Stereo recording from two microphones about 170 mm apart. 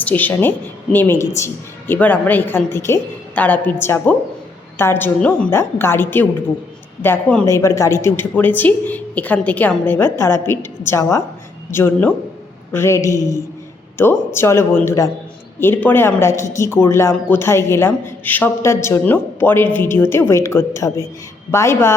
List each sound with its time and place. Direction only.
0.0 s a woman's voice: 10° left (ahead or behind)
14.3 s a woman's voice: 15° left (ahead or behind)